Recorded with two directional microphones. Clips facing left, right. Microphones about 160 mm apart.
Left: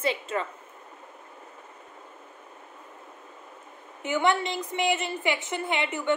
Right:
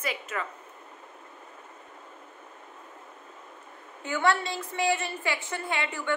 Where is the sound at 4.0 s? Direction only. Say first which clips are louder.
Left 2 dB; 20° left (ahead or behind).